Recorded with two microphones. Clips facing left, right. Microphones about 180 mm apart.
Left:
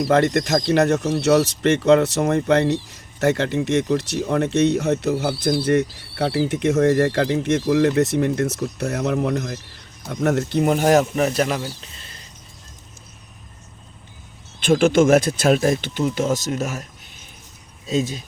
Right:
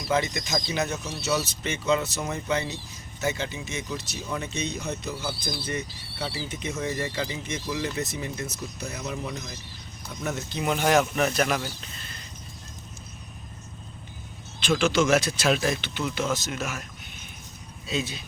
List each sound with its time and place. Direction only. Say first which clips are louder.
0.0 s speech: left 9 dB; 75° left (ahead or behind)
10.6 s speech: left 5 dB; 40° left (ahead or behind)
14.6 s speech: left 8 dB; 50° left (ahead or behind)
17.8 s speech: left 8 dB; 40° left (ahead or behind)